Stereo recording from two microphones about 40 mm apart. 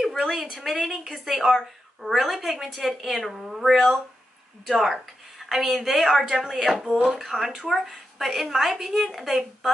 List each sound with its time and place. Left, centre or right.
0.0 s speech: centre